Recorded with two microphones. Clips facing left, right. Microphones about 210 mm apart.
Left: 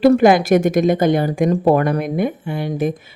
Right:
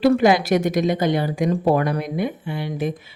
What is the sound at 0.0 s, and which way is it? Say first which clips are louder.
Speech: left 4 dB; 50° left (ahead or behind).